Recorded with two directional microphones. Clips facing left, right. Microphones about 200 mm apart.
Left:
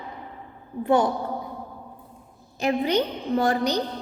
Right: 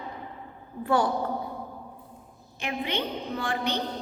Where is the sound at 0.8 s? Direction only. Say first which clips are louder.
Left 4 dB; 20° left (ahead or behind).